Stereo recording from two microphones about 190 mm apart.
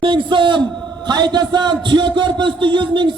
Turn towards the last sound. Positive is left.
turn(degrees=-25)  # may be behind; listen again after turning